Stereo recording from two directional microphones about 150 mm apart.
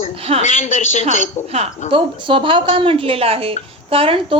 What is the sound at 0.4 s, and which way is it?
Speech, 55° left (ahead or behind).